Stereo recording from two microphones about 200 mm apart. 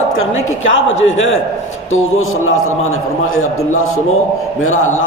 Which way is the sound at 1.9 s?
90° left.